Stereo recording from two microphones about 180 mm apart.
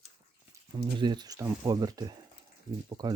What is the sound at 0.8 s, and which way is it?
Speech, 25° right (ahead or behind).